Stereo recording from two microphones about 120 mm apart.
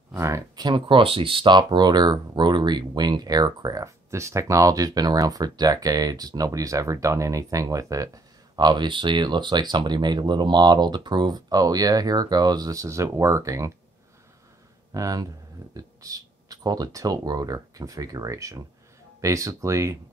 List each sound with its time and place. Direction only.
0.1 s speech: 25° right (ahead or behind)
0.6 s speech: 40° right (ahead or behind)
14.9 s speech: 30° right (ahead or behind)